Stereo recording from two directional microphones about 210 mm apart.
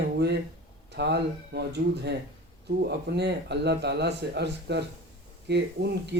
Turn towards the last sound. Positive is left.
turn(degrees=-55)  # may be behind; listen again after turning